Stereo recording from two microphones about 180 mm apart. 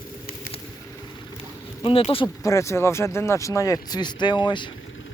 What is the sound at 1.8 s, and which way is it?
Speech, 30° left (ahead or behind).